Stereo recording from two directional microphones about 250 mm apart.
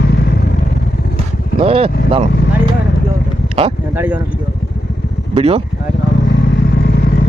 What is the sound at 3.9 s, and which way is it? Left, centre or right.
Speech, centre.